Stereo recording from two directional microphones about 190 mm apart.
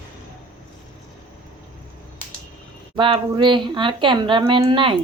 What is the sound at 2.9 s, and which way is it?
A woman's voice, 25° right (ahead or behind).